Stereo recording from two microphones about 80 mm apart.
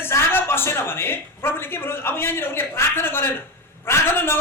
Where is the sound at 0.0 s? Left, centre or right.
Left.